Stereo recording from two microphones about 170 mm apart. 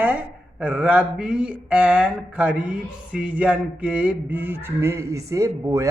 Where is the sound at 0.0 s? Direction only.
10° right (ahead or behind).